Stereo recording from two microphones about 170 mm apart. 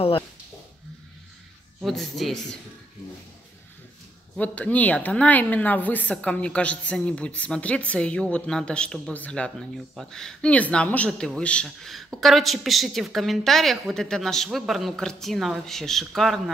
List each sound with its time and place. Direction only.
1.8 s a woman's voice: centre (ahead or behind)
4.4 s a woman's voice: 10° left (ahead or behind)